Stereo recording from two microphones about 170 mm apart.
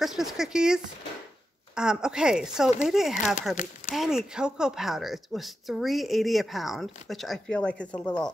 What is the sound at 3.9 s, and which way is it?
Speech, centre (ahead or behind).